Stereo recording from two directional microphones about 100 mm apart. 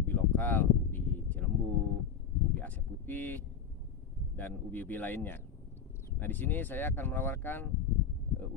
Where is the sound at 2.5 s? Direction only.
20° left (ahead or behind).